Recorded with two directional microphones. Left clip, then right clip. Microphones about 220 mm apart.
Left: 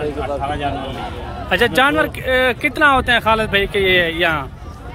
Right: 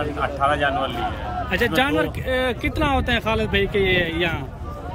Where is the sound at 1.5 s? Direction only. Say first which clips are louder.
Left 6 dB; 5° right (ahead or behind).